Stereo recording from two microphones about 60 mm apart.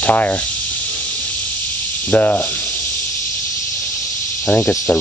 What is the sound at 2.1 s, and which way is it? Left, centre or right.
Rub, left.